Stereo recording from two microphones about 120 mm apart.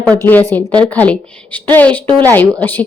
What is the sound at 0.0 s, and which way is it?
A woman's voice, 10° left (ahead or behind).